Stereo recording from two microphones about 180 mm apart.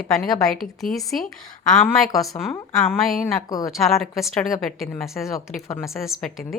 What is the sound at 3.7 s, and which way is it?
A woman's voice, centre (ahead or behind).